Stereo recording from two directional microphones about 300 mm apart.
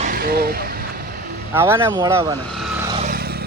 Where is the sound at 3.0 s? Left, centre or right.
Right.